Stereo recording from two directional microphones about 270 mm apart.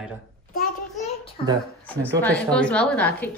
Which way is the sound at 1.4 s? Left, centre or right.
Left.